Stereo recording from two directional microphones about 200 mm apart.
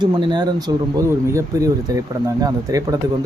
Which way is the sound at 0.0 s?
20° right (ahead or behind).